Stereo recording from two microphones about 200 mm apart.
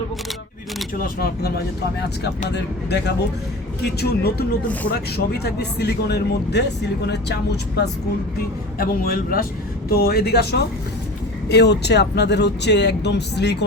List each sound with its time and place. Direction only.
1.0 s speech: 50° left (ahead or behind)